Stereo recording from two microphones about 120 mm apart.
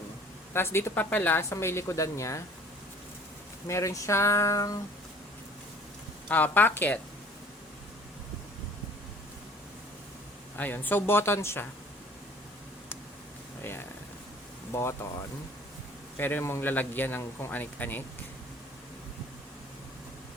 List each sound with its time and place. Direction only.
0.5 s speech: 20° left (ahead or behind)
3.7 s speech: 25° left (ahead or behind)
6.2 s a man's voice: 15° left (ahead or behind)
10.6 s speech: 15° left (ahead or behind)
14.7 s speech: 20° left (ahead or behind)
16.1 s a man's voice: 20° left (ahead or behind)